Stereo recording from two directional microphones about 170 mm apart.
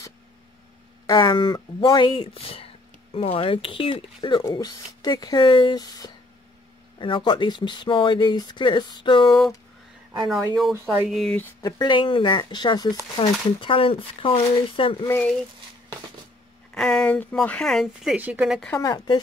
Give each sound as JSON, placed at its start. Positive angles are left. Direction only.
{"t": 1.0, "sound": "speech", "side_deg": 25}
{"t": 10.7, "sound": "speech", "side_deg": -15}
{"t": 11.1, "sound": "speech", "side_deg": 0}
{"t": 11.6, "sound": "speech", "side_deg": 25}
{"t": 15.0, "sound": "speech", "side_deg": 10}
{"t": 16.7, "sound": "speech", "side_deg": 5}
{"t": 18.7, "sound": "speech", "side_deg": 20}